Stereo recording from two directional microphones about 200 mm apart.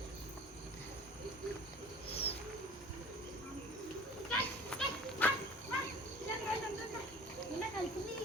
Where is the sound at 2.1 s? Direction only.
30° left (ahead or behind).